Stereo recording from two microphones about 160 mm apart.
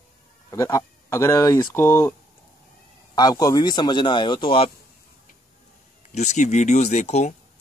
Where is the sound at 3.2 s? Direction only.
25° left (ahead or behind).